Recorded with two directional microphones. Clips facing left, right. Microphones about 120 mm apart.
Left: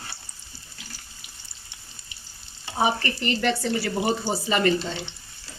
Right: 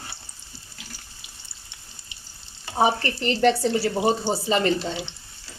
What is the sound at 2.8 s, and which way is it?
Speech, 30° right (ahead or behind).